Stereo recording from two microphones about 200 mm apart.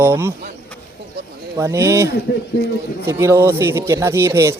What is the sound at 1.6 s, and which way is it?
Speech, 15° right (ahead or behind).